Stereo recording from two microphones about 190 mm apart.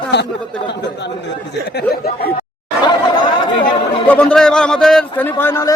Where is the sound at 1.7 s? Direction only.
55° left (ahead or behind).